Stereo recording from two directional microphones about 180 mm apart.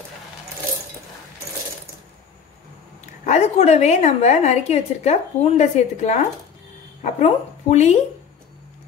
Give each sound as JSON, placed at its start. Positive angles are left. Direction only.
{"t": 3.3, "sound": "a woman's voice", "side_deg": 40}